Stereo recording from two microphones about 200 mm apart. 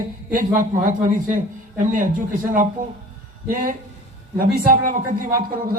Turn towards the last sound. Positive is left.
turn(degrees=-45)  # may be behind; listen again after turning